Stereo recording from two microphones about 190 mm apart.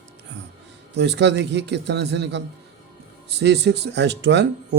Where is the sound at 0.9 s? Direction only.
65° right (ahead or behind).